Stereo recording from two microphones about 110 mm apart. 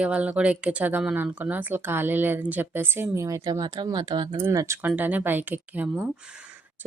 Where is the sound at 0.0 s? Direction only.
10° right (ahead or behind).